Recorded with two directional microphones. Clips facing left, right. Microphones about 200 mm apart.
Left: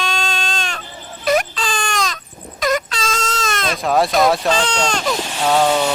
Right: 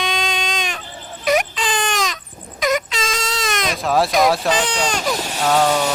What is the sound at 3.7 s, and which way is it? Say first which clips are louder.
Speech: left 1 dB; centre (ahead or behind).